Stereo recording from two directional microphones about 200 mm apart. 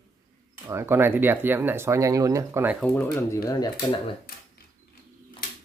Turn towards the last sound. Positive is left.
turn(degrees=25)  # may be behind; listen again after turning